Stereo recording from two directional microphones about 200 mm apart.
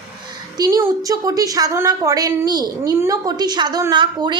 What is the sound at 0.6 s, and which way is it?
A woman's voice, 15° right (ahead or behind).